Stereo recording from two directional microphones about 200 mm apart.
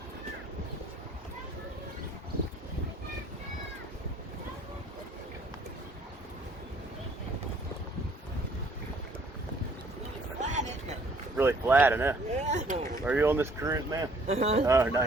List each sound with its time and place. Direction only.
10.4 s a sound: 35° right (ahead or behind)
11.3 s speech: 10° right (ahead or behind)
12.3 s speech: 35° right (ahead or behind)
13.1 s speech: 10° right (ahead or behind)
14.3 s speech: 30° right (ahead or behind)
14.7 s speech: 15° right (ahead or behind)